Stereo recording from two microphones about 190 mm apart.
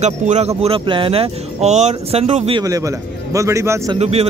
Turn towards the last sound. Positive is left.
turn(degrees=-35)  # may be behind; listen again after turning